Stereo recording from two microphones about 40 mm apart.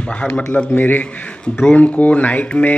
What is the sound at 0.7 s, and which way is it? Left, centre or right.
Speech, left.